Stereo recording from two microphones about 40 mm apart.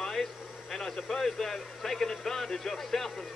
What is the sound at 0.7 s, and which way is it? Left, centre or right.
Speech, centre.